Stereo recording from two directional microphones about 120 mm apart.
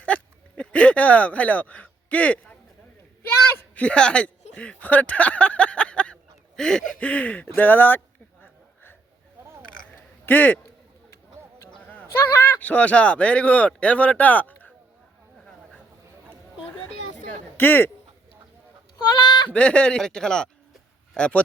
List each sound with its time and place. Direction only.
0.0 s a sound: 10° left (ahead or behind)
4.5 s speech: 10° left (ahead or behind)
9.8 s burping: 15° left (ahead or behind)
11.6 s honk: 15° left (ahead or behind)
12.6 s speech: 10° left (ahead or behind)
17.6 s speech: 15° left (ahead or behind)
19.1 s speech: 40° left (ahead or behind)
19.5 s speech: 10° left (ahead or behind)